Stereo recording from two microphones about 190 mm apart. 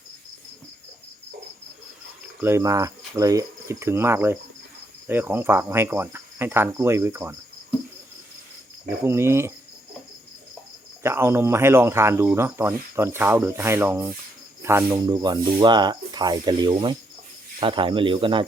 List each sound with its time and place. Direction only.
2.4 s speech: 15° right (ahead or behind)
9.0 s speech: 15° right (ahead or behind)
11.0 s speech: 15° right (ahead or behind)